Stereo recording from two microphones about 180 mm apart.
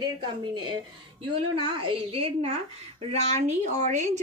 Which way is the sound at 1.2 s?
30° right (ahead or behind).